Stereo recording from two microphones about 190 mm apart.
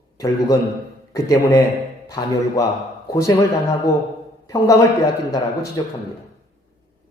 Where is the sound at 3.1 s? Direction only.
15° left (ahead or behind).